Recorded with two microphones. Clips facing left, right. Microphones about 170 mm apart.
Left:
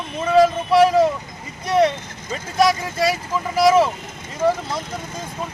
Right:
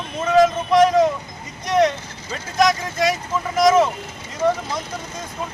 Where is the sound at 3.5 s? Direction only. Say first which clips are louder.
Even; 5° left (ahead or behind).